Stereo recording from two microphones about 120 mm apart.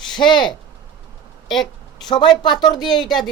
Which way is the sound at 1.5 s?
Centre (ahead or behind).